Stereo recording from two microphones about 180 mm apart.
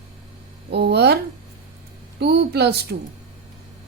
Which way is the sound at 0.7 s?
65° right (ahead or behind).